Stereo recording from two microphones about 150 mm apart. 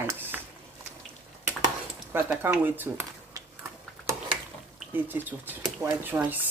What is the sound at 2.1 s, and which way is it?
Speech, 15° right (ahead or behind).